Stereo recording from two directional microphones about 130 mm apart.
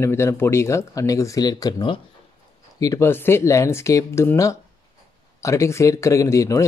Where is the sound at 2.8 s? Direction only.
20° left (ahead or behind).